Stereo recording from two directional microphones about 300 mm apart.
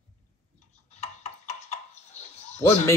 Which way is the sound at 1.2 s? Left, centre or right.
Left.